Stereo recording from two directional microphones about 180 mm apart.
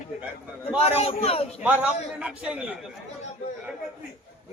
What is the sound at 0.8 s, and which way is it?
Speech, 35° left (ahead or behind).